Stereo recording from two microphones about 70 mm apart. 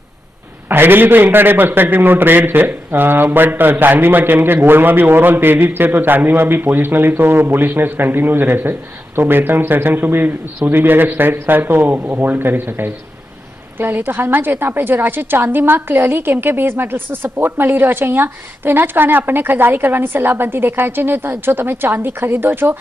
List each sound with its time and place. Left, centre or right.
0.7 s a man's voice: right